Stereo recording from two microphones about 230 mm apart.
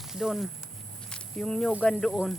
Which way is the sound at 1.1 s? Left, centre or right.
Centre.